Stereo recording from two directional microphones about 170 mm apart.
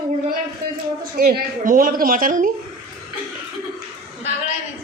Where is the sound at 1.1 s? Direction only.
65° right (ahead or behind).